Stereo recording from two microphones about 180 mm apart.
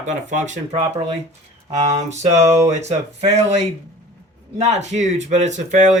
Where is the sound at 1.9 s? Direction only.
40° right (ahead or behind).